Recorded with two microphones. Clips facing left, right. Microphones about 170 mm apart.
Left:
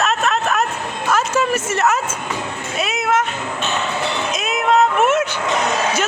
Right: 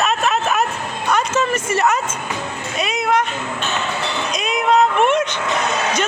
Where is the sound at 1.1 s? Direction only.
5° left (ahead or behind).